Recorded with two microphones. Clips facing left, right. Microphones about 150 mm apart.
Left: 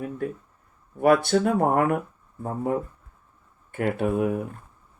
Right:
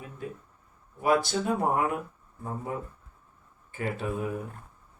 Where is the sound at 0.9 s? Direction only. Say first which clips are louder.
Left 6 dB; 60° left (ahead or behind).